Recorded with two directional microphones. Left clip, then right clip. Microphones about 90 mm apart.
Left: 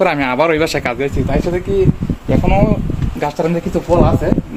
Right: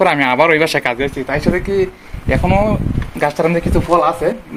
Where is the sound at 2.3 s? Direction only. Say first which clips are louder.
Right 1 dB; 25° left (ahead or behind).